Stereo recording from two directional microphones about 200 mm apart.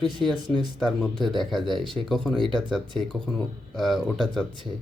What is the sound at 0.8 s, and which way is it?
Speech, centre (ahead or behind).